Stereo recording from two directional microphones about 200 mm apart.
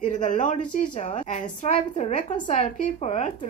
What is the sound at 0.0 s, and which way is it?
A woman's voice, 40° left (ahead or behind).